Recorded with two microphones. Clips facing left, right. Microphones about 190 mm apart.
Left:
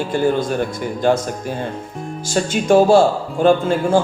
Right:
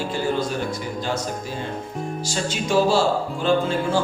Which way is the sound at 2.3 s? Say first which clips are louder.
Left 10 dB; 50° left (ahead or behind).